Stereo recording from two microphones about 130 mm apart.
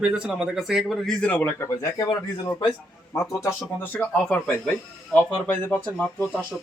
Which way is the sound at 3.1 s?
25° left (ahead or behind).